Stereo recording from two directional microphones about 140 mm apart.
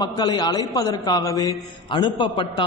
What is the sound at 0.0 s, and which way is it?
A man's voice, 30° left (ahead or behind).